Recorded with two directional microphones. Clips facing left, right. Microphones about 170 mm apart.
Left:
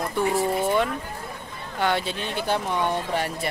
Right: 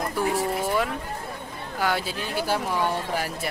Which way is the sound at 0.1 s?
Centre (ahead or behind).